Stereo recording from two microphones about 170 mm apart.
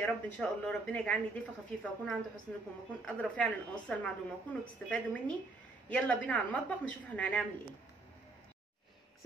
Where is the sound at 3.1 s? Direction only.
5° left (ahead or behind).